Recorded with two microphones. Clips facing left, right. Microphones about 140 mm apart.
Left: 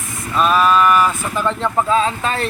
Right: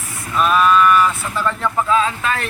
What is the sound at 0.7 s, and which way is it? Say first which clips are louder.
Speech: even; 10° left (ahead or behind).